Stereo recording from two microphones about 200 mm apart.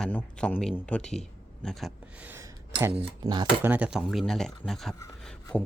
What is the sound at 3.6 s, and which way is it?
Speech, 5° right (ahead or behind).